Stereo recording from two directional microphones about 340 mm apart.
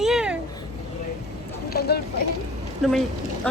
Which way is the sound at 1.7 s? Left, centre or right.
Left.